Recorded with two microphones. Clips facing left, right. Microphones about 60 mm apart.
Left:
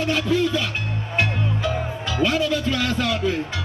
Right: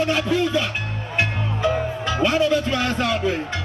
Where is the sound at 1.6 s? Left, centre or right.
Right.